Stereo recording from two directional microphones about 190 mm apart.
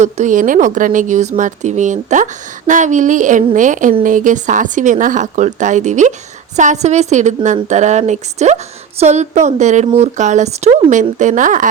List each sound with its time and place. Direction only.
0.0 s speech: 40° right (ahead or behind)